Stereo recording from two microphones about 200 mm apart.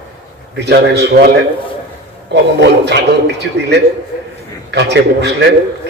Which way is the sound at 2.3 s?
60° right (ahead or behind).